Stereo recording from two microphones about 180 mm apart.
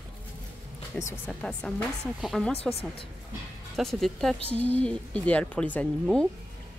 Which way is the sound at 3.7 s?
Centre (ahead or behind).